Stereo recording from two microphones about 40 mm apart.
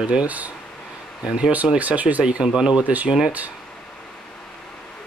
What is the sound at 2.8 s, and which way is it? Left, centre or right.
Speech, right.